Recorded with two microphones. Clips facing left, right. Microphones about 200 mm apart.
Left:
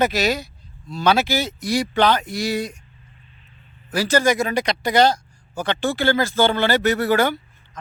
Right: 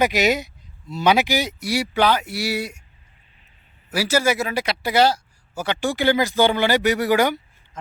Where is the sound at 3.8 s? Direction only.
10° right (ahead or behind).